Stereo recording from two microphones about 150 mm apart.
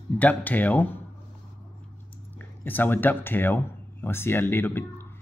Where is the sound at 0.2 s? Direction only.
10° left (ahead or behind).